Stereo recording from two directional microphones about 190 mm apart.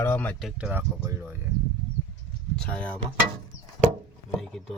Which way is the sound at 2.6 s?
5° left (ahead or behind).